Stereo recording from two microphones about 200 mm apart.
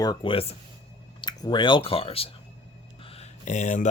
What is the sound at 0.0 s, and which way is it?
Speech, 20° left (ahead or behind).